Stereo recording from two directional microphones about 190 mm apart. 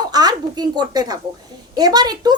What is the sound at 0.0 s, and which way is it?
A woman's voice, 20° right (ahead or behind).